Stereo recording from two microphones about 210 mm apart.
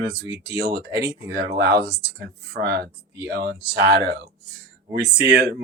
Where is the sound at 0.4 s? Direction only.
50° right (ahead or behind).